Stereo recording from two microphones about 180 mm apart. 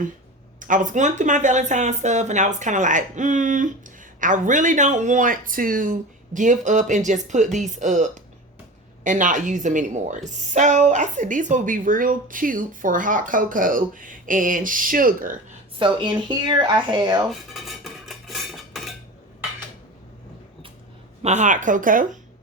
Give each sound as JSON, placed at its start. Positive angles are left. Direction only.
{"t": 0.6, "sound": "speech", "side_deg": -45}
{"t": 15.8, "sound": "speech", "side_deg": -25}
{"t": 17.2, "sound": "dishes", "side_deg": 0}
{"t": 21.2, "sound": "speech", "side_deg": -40}